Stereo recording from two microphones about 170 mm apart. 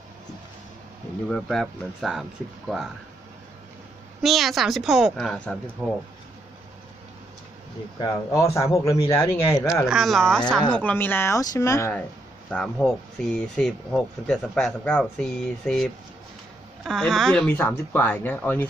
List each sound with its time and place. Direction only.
1.3 s speech: centre (ahead or behind)
4.2 s speech: centre (ahead or behind)
8.0 s speech: 20° left (ahead or behind)
9.8 s speech: centre (ahead or behind)